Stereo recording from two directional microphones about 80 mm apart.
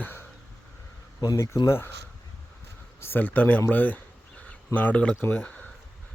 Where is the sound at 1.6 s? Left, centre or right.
Left.